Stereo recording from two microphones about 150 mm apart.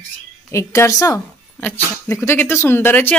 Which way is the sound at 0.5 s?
20° left (ahead or behind).